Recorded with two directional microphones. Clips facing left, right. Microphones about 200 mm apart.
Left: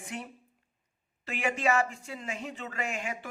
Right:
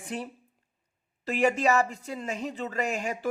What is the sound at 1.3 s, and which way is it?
Speech, 40° right (ahead or behind).